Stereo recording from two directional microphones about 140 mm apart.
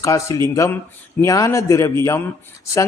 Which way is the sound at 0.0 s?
25° left (ahead or behind).